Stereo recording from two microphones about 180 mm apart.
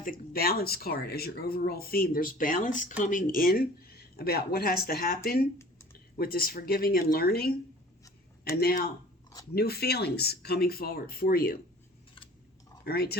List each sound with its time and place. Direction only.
0.0 s speech: 55° left (ahead or behind)
12.1 s scissors: 30° left (ahead or behind)
12.8 s speech: 60° left (ahead or behind)